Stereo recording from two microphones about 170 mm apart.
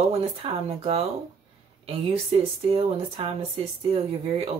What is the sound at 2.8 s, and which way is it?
Speech, 35° right (ahead or behind).